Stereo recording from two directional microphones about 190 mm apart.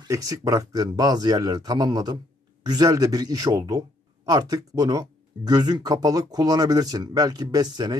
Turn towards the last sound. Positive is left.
turn(degrees=-20)  # may be behind; listen again after turning